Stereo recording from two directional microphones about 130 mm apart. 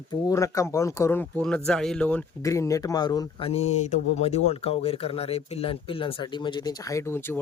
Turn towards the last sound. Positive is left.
turn(degrees=20)  # may be behind; listen again after turning